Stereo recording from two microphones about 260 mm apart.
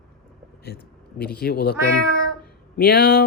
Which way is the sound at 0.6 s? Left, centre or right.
Left.